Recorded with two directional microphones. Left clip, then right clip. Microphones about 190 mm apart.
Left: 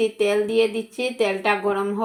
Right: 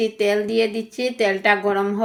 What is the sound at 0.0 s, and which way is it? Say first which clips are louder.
Speech: even; 25° right (ahead or behind).